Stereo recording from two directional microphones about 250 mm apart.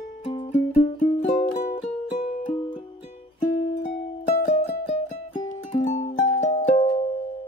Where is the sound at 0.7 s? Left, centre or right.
Left.